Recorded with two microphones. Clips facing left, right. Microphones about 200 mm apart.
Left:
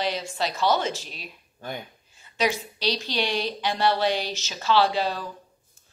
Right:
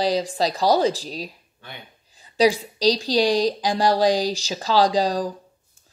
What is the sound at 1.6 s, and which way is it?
Speech, 45° left (ahead or behind).